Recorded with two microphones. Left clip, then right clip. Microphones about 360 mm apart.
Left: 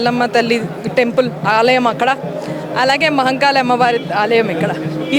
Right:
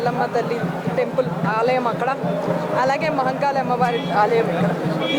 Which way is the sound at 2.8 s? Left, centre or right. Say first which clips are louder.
Left 8 dB; left.